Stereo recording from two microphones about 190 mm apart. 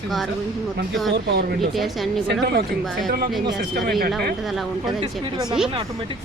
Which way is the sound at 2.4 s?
60° right (ahead or behind).